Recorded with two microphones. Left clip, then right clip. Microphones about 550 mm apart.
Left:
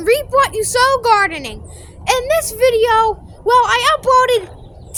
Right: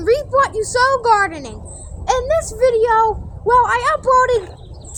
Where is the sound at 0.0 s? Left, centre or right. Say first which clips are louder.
Left 2 dB; left.